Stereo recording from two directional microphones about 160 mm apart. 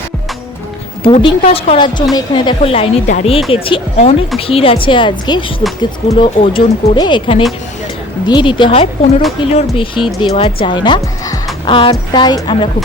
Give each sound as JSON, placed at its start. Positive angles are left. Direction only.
{"t": 1.0, "sound": "a woman's voice", "side_deg": 35}